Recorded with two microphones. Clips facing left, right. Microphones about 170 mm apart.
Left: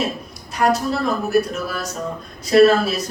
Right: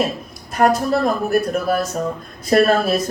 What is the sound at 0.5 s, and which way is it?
A man's voice, 50° right (ahead or behind).